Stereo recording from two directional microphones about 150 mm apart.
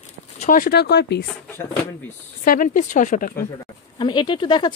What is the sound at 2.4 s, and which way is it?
Speech, 65° left (ahead or behind).